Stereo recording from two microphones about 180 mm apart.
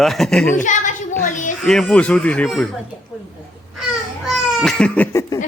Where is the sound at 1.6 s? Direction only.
Centre (ahead or behind).